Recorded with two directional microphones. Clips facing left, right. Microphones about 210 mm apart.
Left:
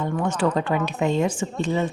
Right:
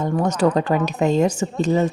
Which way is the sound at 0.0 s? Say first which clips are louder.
Right 4 dB; 40° right (ahead or behind).